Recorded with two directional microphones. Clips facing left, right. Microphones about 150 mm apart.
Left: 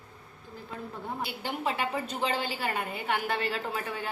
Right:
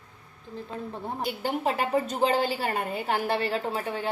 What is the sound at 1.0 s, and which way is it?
A woman's voice, 40° right (ahead or behind).